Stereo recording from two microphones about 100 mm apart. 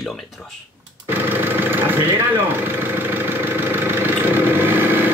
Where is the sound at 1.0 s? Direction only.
20° right (ahead or behind).